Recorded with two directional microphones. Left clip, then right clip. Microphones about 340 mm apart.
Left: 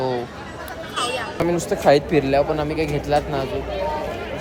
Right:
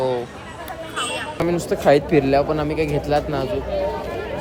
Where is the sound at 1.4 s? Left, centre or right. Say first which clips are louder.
Right 1 dB; centre.